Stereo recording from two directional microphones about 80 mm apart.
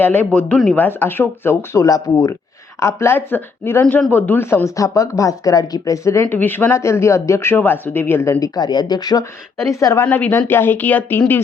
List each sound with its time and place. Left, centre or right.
0.0 s speech: left
1.8 s speech: left
2.8 s speech: left
6.2 s speech: left
6.7 s speech: left
8.3 s speech: left
10.0 s speech: left